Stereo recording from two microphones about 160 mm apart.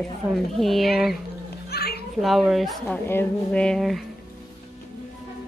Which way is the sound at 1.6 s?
80° left.